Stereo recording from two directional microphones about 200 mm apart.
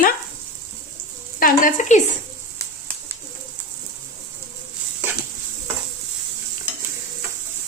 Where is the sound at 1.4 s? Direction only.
45° left (ahead or behind).